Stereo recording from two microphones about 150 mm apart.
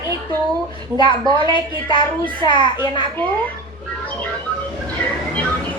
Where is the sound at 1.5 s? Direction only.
30° left (ahead or behind).